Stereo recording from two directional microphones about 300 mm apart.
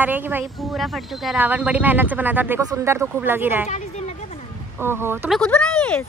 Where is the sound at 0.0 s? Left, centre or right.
Centre.